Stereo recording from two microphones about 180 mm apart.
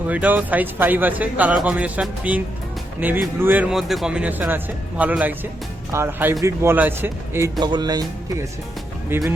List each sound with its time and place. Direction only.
0.1 s speech: 10° right (ahead or behind)
7.6 s speech: 25° right (ahead or behind)